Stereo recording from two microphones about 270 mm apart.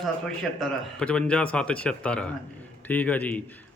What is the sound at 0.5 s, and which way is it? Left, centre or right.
Speech, centre.